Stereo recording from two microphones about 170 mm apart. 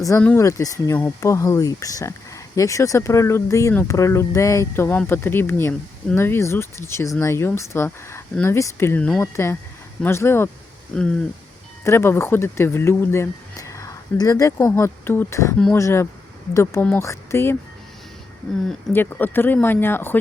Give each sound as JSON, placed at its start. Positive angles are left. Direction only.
{"t": 0.2, "sound": "speech", "side_deg": 15}
{"t": 15.5, "sound": "speech", "side_deg": 5}
{"t": 18.9, "sound": "speech", "side_deg": 10}